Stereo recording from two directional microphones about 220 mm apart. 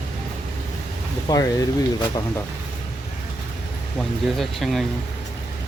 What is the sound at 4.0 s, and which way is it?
Speech, centre (ahead or behind).